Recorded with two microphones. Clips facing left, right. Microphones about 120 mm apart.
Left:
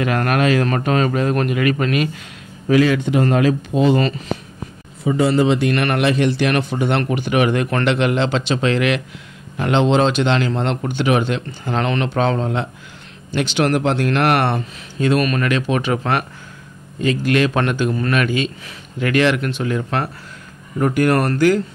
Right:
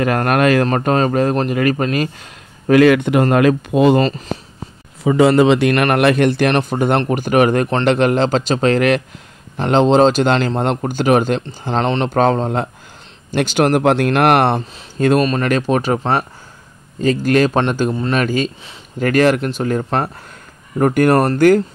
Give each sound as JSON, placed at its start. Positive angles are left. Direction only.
{"t": 0.0, "sound": "a man's voice", "side_deg": -45}
{"t": 2.7, "sound": "speech", "side_deg": -60}
{"t": 5.0, "sound": "a man's voice", "side_deg": -90}
{"t": 5.8, "sound": "a man's voice", "side_deg": -55}
{"t": 15.1, "sound": "a man's voice", "side_deg": -30}
{"t": 16.0, "sound": "speech", "side_deg": -25}
{"t": 17.0, "sound": "a man's voice", "side_deg": -40}